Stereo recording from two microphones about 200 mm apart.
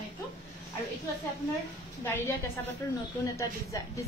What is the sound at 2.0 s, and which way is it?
A woman's voice, 10° left (ahead or behind).